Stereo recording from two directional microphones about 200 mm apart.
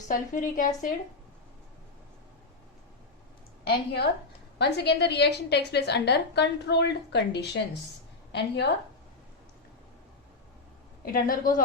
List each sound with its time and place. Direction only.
0.1 s a woman's voice: 40° left (ahead or behind)
3.6 s a woman's voice: 55° left (ahead or behind)
11.0 s a woman's voice: 45° left (ahead or behind)